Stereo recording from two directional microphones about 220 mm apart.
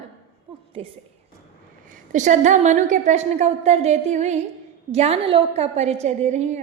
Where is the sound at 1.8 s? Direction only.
35° right (ahead or behind).